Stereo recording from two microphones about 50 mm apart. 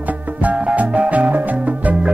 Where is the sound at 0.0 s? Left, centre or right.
Right.